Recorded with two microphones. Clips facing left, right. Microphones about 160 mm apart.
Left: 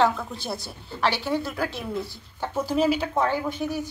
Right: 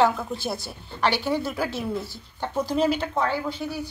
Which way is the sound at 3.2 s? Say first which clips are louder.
Left 1 dB; 15° left (ahead or behind).